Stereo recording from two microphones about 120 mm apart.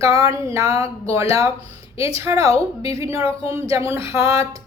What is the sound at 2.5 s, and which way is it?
Speech, 55° left (ahead or behind).